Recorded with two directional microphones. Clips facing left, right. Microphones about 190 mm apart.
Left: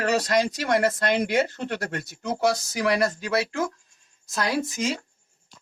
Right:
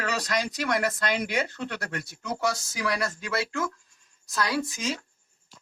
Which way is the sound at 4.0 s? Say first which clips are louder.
Left 1 dB; 25° left (ahead or behind).